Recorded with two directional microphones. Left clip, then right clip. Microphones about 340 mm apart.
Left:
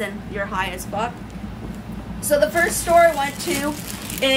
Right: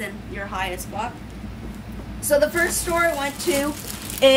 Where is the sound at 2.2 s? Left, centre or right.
Centre.